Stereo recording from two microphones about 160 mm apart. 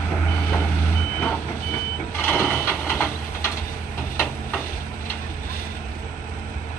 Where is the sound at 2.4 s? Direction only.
10° left (ahead or behind).